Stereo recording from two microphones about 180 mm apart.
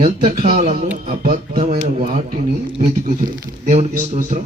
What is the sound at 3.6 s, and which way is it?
Speech, 40° right (ahead or behind).